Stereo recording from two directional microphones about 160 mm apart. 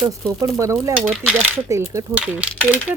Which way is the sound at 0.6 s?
20° right (ahead or behind).